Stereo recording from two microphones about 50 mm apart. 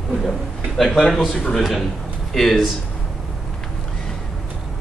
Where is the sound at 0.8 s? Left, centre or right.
Centre.